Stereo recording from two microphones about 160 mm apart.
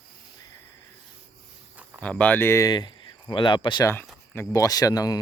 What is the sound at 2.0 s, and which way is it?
Speech, 10° left (ahead or behind).